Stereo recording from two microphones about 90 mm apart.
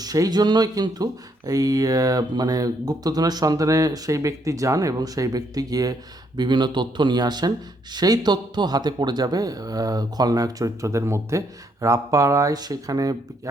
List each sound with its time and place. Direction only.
0.0 s speech: 45° right (ahead or behind)